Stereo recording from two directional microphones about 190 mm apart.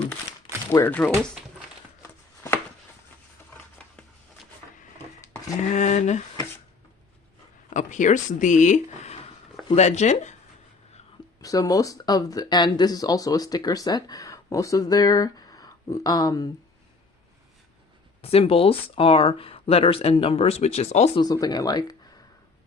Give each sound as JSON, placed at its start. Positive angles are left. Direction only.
{"t": 0.7, "sound": "speech", "side_deg": 15}
{"t": 2.0, "sound": "chopping", "side_deg": 15}
{"t": 3.5, "sound": "a sound", "side_deg": 5}
{"t": 5.7, "sound": "speech", "side_deg": 40}
{"t": 7.7, "sound": "speech", "side_deg": 40}
{"t": 11.3, "sound": "speech", "side_deg": 20}
{"t": 18.2, "sound": "speech", "side_deg": 30}
{"t": 21.2, "sound": "speech", "side_deg": 20}